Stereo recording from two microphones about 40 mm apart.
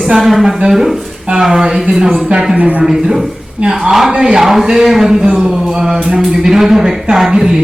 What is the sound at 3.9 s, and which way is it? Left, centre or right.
Speech, centre.